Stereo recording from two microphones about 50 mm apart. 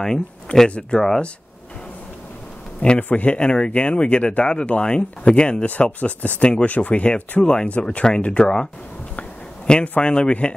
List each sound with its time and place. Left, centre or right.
0.0 s speech: centre
0.9 s speech: centre
2.8 s speech: centre
9.9 s speech: left